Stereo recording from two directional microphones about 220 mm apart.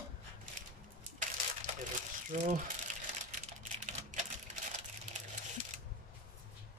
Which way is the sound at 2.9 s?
35° right (ahead or behind).